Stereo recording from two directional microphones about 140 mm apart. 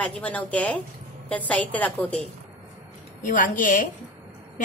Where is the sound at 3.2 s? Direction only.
70° left (ahead or behind).